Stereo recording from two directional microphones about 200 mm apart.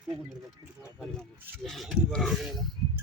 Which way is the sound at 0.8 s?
Centre (ahead or behind).